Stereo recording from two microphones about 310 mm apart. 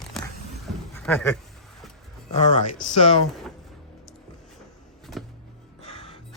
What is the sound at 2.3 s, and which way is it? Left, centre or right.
Speech, left.